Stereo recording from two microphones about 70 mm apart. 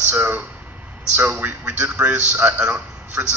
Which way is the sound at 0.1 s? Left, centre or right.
Right.